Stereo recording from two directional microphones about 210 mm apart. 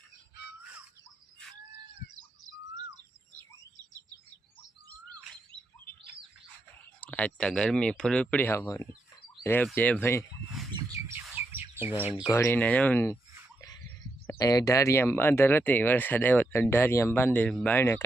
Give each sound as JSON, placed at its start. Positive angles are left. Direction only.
{"t": 7.0, "sound": "speech", "side_deg": 5}
{"t": 10.8, "sound": "bird", "side_deg": -15}
{"t": 12.3, "sound": "speech", "side_deg": 10}
{"t": 14.3, "sound": "speech", "side_deg": 15}